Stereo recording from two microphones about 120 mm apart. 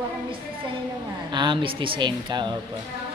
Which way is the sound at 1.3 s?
40° right (ahead or behind).